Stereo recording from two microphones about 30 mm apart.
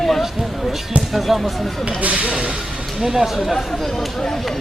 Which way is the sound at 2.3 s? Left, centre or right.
Right.